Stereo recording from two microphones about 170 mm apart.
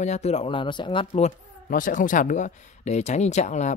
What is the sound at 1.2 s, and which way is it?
Speech, 50° left (ahead or behind).